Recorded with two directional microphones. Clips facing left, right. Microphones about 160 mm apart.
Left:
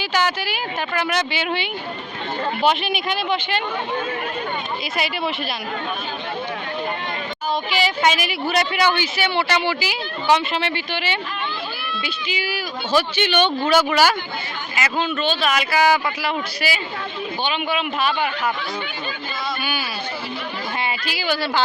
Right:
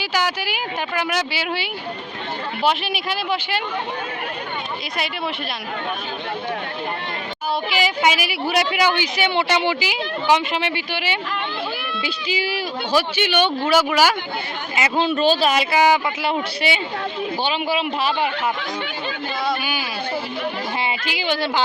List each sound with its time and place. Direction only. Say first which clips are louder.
0.0 s a woman's voice: left 1 dB; 10° right (ahead or behind)
7.8 s a woman's voice: even; 10° right (ahead or behind)
12.0 s speech: right 3 dB; 30° right (ahead or behind)
12.9 s a woman's voice: left 1 dB; 10° right (ahead or behind)
14.8 s speech: right 2 dB; 20° right (ahead or behind)
15.0 s speech: right 7 dB; 35° right (ahead or behind)
20.8 s speech: left 1 dB; 20° right (ahead or behind)